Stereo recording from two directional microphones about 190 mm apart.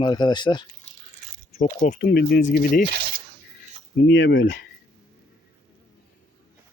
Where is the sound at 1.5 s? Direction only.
45° left (ahead or behind).